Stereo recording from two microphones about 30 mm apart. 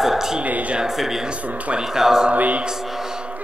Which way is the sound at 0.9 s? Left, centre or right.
Centre.